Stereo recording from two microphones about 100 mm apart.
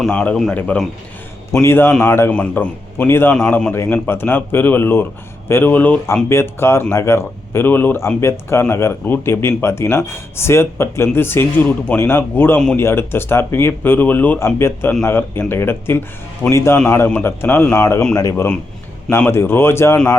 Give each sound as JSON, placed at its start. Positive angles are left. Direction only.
{"t": 0.1, "sound": "a man's voice", "side_deg": 10}
{"t": 1.9, "sound": "a man's voice", "side_deg": 10}
{"t": 3.1, "sound": "a man's voice", "side_deg": 25}
{"t": 19.3, "sound": "speech", "side_deg": 25}